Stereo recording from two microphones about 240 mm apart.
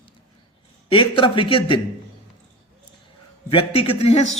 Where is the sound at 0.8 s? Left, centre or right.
Left.